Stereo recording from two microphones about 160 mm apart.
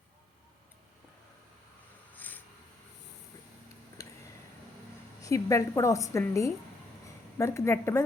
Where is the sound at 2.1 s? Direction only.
10° left (ahead or behind).